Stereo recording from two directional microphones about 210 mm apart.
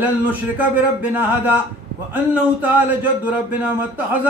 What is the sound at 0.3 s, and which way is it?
Speech, 10° right (ahead or behind).